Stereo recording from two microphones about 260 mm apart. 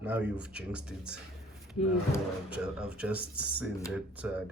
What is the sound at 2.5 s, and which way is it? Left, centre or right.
Speech, centre.